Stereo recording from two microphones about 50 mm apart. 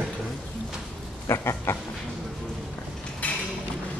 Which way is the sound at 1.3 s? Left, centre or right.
Left.